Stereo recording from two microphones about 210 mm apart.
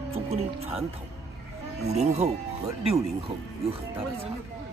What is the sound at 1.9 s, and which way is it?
Speech, 30° right (ahead or behind).